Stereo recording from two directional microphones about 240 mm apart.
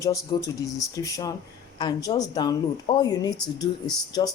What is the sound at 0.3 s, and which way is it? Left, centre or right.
Speech, centre.